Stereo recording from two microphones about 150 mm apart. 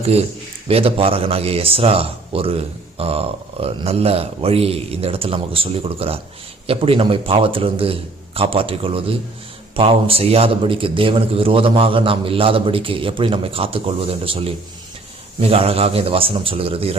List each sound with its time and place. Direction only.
0.0 s a man's voice: 45° right (ahead or behind)